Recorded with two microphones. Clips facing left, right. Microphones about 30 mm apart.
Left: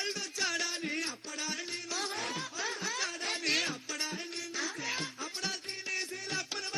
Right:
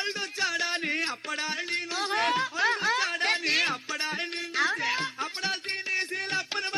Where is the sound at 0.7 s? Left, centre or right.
Right.